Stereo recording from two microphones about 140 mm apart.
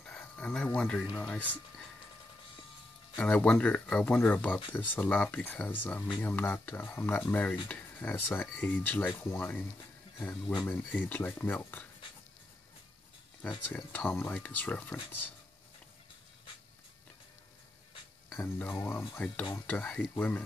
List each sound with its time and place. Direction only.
0.0 s a sound: 5° left (ahead or behind)
1.1 s speech: 10° left (ahead or behind)
3.2 s speech: 10° left (ahead or behind)
13.7 s speech: 10° left (ahead or behind)
18.3 s speech: 20° left (ahead or behind)